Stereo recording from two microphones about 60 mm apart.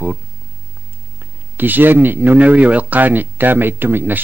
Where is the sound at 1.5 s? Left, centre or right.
Right.